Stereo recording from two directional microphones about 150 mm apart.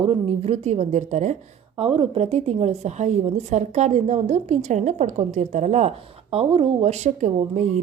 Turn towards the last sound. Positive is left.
turn(degrees=-50)  # may be behind; listen again after turning